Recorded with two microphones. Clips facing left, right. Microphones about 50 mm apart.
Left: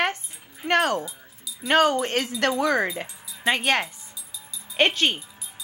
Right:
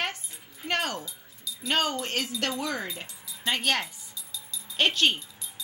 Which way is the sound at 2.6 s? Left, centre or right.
Left.